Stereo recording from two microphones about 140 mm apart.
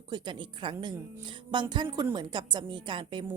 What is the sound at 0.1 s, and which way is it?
A woman's voice, 35° right (ahead or behind).